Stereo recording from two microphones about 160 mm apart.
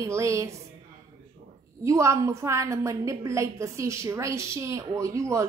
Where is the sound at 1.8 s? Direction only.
20° right (ahead or behind).